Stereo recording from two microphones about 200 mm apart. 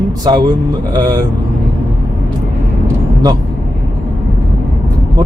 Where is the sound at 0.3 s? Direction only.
20° right (ahead or behind).